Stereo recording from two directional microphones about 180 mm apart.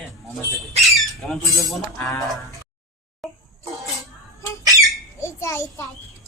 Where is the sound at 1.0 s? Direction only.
Centre (ahead or behind).